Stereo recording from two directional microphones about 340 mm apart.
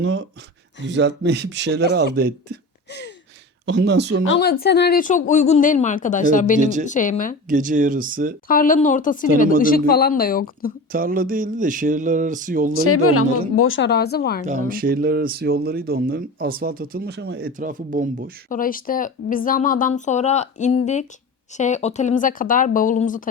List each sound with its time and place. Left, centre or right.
0.0 s speech: right
3.7 s speech: right
4.3 s speech: left
7.4 s speech: right
8.4 s speech: left
10.9 s speech: right
12.8 s speech: left
14.4 s speech: right
18.4 s speech: left